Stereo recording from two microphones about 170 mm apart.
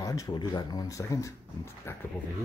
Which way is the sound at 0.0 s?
20° left (ahead or behind).